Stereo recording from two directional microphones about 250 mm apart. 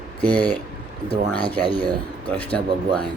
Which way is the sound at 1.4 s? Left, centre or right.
Left.